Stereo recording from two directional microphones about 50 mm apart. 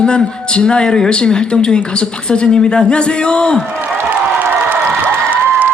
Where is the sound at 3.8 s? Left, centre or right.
Right.